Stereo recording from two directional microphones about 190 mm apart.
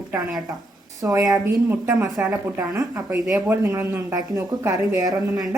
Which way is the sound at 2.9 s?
20° right (ahead or behind).